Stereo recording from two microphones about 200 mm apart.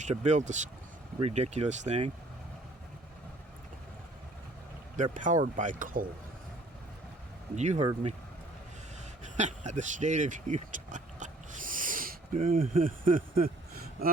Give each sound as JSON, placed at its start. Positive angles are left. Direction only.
{"t": 0.0, "sound": "speech", "side_deg": -35}
{"t": 5.1, "sound": "speech", "side_deg": -40}
{"t": 7.5, "sound": "speech", "side_deg": -35}
{"t": 9.3, "sound": "vehicle", "side_deg": -35}
{"t": 12.5, "sound": "speech", "side_deg": -45}